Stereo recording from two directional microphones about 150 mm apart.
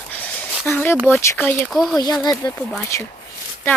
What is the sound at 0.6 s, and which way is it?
Speech, 15° left (ahead or behind).